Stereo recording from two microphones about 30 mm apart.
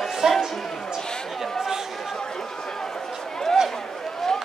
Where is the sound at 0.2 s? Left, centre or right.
Right.